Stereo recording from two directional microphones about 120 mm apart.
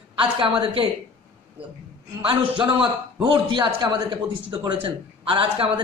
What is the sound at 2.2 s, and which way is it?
A man's voice, 45° right (ahead or behind).